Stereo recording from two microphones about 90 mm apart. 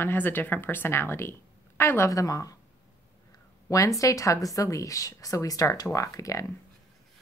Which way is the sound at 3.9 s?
40° left (ahead or behind).